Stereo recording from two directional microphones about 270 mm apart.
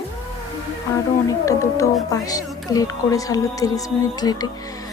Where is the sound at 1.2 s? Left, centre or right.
Centre.